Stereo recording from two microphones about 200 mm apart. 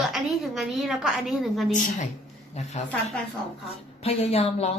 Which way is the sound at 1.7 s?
40° left (ahead or behind).